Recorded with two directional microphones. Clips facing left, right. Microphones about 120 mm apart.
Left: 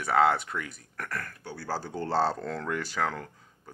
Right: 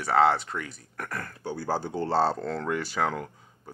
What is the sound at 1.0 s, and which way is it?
Speech, 25° right (ahead or behind).